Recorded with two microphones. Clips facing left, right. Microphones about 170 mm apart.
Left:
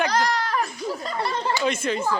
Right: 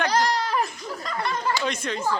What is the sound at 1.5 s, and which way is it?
Speech, 5° left (ahead or behind).